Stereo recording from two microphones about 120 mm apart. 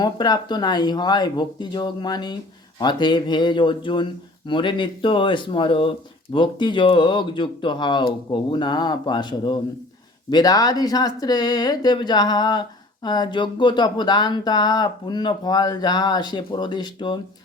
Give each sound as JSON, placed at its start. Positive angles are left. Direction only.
{"t": 0.0, "sound": "speech", "side_deg": 35}